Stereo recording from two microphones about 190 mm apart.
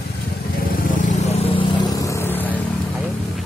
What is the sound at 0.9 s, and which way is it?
Vehicle, 40° left (ahead or behind).